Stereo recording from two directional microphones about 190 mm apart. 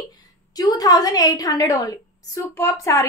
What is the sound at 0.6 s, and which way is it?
A woman's voice, 20° left (ahead or behind).